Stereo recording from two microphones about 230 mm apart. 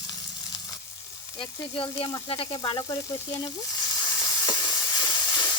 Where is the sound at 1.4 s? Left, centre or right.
Left.